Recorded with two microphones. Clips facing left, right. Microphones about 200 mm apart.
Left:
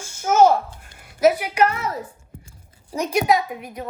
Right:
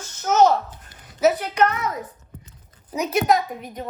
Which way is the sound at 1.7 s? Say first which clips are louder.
Even; 30° left (ahead or behind).